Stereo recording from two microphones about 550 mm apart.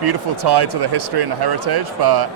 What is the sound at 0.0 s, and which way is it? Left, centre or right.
Speech, right.